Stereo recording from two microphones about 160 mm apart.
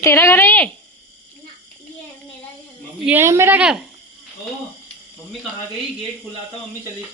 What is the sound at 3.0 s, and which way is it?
Speech, 15° right (ahead or behind).